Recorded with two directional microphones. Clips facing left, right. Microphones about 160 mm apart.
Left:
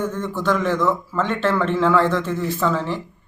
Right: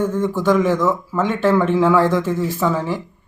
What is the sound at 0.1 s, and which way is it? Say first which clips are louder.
Speech: right 5 dB; 15° right (ahead or behind).